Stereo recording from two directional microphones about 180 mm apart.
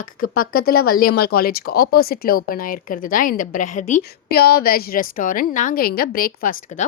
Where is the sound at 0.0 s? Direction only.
50° left (ahead or behind).